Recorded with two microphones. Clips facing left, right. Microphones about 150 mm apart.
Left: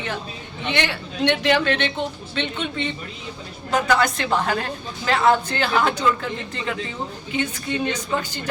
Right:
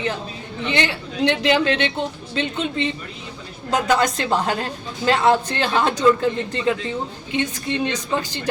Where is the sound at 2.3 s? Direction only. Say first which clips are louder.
Right 4 dB; 35° right (ahead or behind).